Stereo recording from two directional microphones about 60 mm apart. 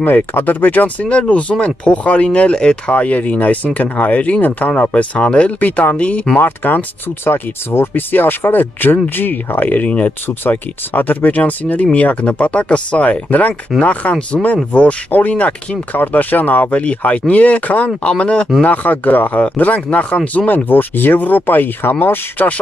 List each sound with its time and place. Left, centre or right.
0.0 s speech: left
6.3 s speech: left
10.2 s speech: left